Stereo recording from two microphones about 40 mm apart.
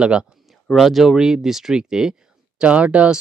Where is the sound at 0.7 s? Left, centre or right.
Centre.